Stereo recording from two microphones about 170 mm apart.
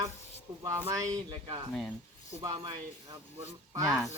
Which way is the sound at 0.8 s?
20° right (ahead or behind).